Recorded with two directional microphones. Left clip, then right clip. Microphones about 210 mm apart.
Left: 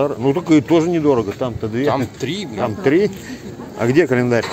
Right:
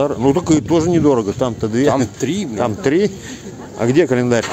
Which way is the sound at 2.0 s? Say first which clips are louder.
Right 3 dB; 55° right (ahead or behind).